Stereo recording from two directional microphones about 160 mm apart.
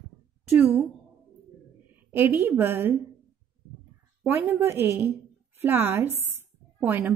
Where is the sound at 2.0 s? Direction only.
15° right (ahead or behind).